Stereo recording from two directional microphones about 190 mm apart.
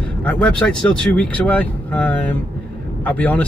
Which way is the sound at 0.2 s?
5° left (ahead or behind).